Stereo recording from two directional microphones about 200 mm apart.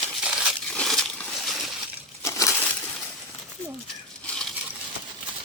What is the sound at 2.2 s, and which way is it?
Crushing, 15° left (ahead or behind).